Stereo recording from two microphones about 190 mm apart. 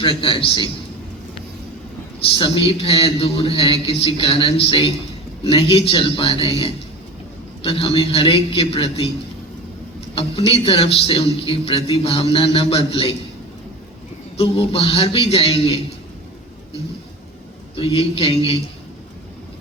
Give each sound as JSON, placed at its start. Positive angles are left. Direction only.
{"t": 0.0, "sound": "speech", "side_deg": 30}
{"t": 2.3, "sound": "a man's voice", "side_deg": 30}
{"t": 10.2, "sound": "a man's voice", "side_deg": 30}
{"t": 14.3, "sound": "a man's voice", "side_deg": 30}
{"t": 17.7, "sound": "a man's voice", "side_deg": 30}